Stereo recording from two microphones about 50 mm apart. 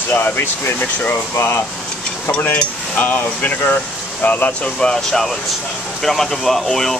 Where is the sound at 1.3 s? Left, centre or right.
Left.